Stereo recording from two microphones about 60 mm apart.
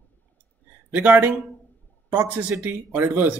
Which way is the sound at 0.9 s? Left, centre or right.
Right.